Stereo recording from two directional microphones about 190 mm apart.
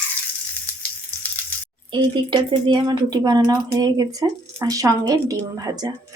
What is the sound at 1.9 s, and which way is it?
Speech, 25° right (ahead or behind).